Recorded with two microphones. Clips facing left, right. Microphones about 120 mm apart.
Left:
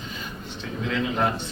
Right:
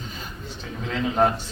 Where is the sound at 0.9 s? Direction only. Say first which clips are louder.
Right 3 dB; 35° right (ahead or behind).